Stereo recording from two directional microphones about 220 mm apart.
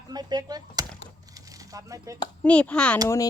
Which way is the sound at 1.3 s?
15° right (ahead or behind).